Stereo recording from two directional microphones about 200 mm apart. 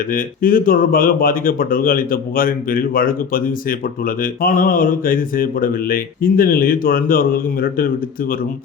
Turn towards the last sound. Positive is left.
turn(degrees=45)  # may be behind; listen again after turning